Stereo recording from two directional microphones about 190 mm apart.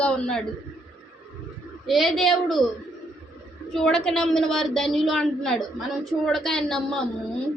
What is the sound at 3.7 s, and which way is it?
A woman's voice, 5° left (ahead or behind).